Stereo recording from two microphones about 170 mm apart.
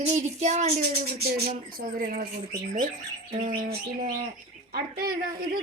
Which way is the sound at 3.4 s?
55° right (ahead or behind).